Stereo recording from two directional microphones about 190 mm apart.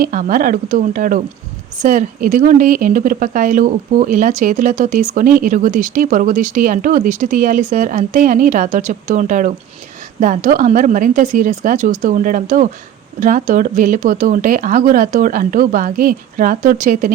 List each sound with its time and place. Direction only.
0.0 s speech: 45° right (ahead or behind)